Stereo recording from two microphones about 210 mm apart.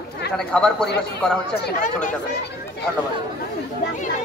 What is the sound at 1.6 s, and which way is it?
Speech, 45° left (ahead or behind).